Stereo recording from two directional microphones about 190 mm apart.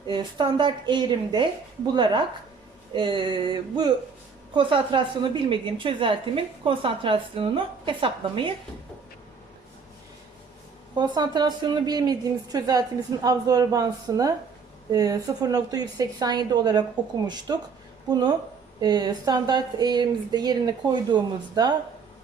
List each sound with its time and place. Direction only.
0.1 s a woman's voice: 25° right (ahead or behind)
10.9 s a woman's voice: 20° right (ahead or behind)